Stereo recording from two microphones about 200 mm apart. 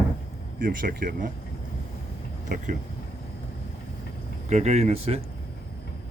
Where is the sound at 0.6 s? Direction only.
45° right (ahead or behind).